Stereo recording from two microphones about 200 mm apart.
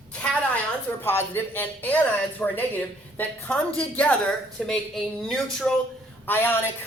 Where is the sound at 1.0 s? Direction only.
10° left (ahead or behind).